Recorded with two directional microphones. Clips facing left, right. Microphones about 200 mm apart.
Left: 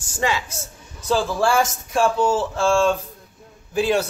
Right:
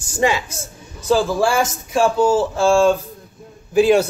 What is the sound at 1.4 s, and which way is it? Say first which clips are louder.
A man's voice: right 1 dB; 5° right (ahead or behind).